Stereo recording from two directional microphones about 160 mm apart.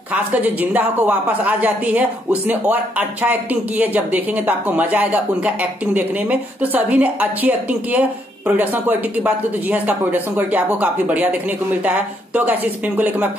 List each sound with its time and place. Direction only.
0.1 s a woman's voice: 10° right (ahead or behind)
12.4 s a woman's voice: 10° right (ahead or behind)